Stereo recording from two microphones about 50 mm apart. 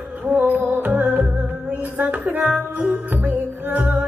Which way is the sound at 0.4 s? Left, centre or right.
Right.